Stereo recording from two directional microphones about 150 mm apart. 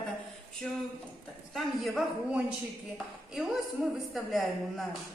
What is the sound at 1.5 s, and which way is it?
A man's voice, centre (ahead or behind).